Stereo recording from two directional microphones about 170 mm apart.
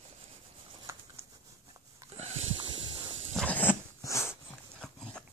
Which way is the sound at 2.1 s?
40° right (ahead or behind).